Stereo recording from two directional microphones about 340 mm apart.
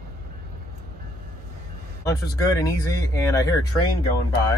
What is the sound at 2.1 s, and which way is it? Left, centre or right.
Speech, centre.